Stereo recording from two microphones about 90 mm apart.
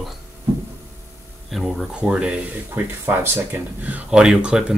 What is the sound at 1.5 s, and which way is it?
Speech, centre (ahead or behind).